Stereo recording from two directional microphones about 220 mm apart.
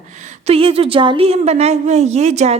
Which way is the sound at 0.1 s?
35° right (ahead or behind).